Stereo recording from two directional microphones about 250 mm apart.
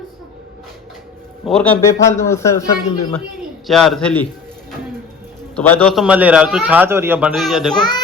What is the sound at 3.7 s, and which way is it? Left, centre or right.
Speech, centre.